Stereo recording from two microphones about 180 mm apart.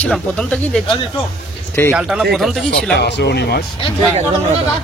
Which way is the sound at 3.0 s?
70° left (ahead or behind).